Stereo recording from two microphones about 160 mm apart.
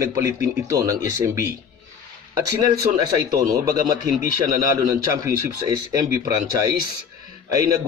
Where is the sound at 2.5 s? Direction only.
20° right (ahead or behind).